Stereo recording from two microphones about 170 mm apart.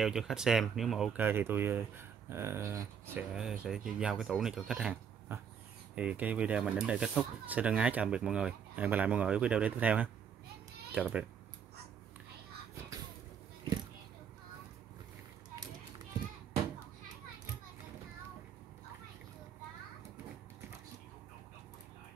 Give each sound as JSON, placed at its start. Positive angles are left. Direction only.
{"t": 0.0, "sound": "speech", "side_deg": 0}
{"t": 3.3, "sound": "a child's voice", "side_deg": -5}